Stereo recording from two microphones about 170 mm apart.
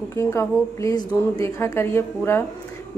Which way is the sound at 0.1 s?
15° left (ahead or behind).